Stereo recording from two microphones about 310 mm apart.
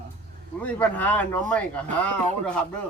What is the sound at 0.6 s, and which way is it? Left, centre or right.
Speech, centre.